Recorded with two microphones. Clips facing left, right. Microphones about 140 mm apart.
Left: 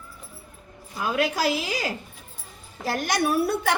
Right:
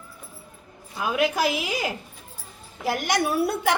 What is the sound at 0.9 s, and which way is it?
A woman's voice, 20° right (ahead or behind).